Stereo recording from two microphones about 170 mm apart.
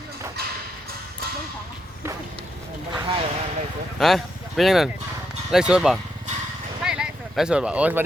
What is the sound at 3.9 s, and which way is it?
Speech, centre (ahead or behind).